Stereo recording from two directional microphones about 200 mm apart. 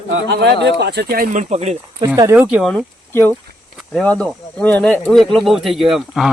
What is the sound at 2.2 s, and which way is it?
Speech, 15° right (ahead or behind).